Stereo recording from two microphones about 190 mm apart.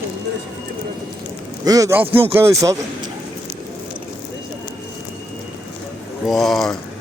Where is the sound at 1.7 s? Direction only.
15° right (ahead or behind).